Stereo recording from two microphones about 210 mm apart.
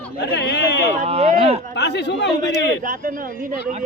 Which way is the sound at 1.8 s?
55° left (ahead or behind).